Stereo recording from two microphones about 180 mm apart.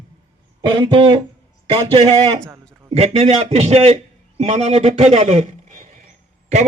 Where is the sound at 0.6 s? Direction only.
25° right (ahead or behind).